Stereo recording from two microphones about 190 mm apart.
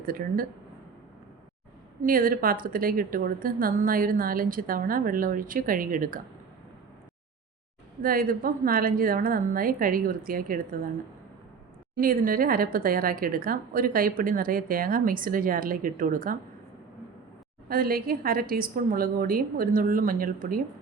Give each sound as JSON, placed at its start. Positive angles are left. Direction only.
{"t": 0.0, "sound": "a woman's voice", "side_deg": -50}
{"t": 2.0, "sound": "a woman's voice", "side_deg": -50}
{"t": 8.0, "sound": "a woman's voice", "side_deg": -50}
{"t": 11.9, "sound": "a woman's voice", "side_deg": -50}
{"t": 17.7, "sound": "a woman's voice", "side_deg": -50}